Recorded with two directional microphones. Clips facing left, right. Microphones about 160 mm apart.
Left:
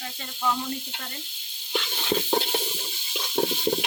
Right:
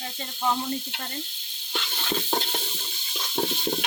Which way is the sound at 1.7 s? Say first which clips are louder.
Left 4 dB; 10° left (ahead or behind).